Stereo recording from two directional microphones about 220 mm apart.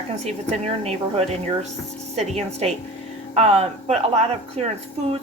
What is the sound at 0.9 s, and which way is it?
A woman's voice, 30° right (ahead or behind).